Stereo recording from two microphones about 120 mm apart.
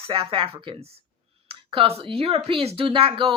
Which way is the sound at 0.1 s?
45° right (ahead or behind).